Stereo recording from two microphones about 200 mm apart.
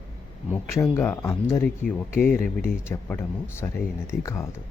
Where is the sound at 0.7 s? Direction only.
15° left (ahead or behind).